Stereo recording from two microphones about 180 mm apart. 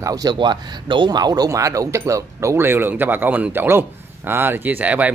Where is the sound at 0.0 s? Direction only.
20° right (ahead or behind).